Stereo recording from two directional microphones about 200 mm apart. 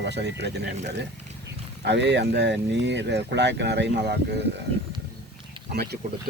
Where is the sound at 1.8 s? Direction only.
60° right (ahead or behind).